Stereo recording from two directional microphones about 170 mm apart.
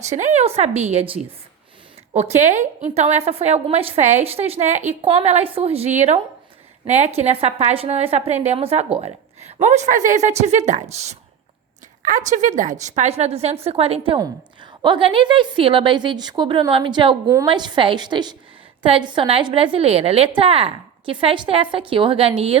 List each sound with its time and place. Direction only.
0.0 s a woman's voice: 45° right (ahead or behind)